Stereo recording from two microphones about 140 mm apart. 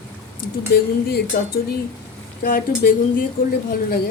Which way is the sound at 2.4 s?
80° left.